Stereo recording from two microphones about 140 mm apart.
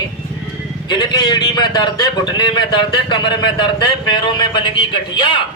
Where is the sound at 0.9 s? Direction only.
30° left (ahead or behind).